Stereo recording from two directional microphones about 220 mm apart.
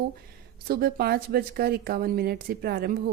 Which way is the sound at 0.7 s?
45° right (ahead or behind).